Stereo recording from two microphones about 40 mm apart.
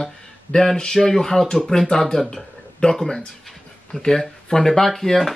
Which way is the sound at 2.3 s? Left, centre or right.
Left.